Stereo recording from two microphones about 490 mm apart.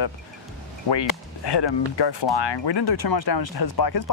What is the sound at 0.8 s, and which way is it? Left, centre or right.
Speech, left.